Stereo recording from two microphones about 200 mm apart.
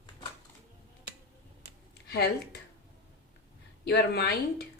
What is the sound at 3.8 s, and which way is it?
Speech, 55° left (ahead or behind).